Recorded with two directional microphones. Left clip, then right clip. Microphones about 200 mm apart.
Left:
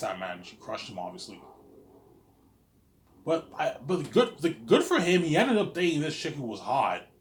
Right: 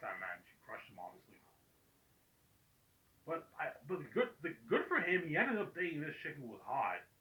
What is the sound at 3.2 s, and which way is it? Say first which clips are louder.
A man's voice: left 14 dB; 45° left (ahead or behind).